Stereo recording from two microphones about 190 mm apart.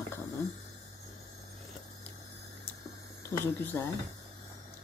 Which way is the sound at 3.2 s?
15° left (ahead or behind).